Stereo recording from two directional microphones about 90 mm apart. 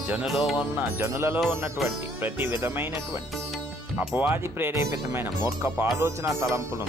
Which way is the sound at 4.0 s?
20° right (ahead or behind).